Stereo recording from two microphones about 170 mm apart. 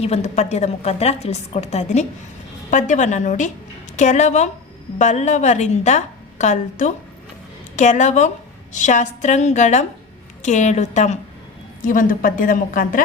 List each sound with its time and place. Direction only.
0.0 s a woman's voice: 40° left (ahead or behind)